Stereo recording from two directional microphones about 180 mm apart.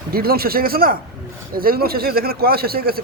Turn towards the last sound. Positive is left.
turn(degrees=-55)  # may be behind; listen again after turning